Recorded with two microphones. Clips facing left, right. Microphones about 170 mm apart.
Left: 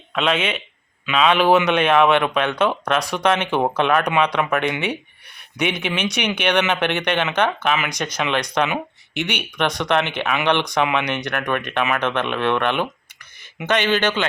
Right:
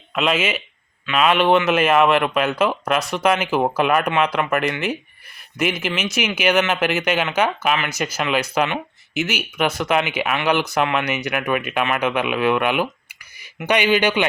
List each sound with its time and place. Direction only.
0.1 s speech: 5° right (ahead or behind)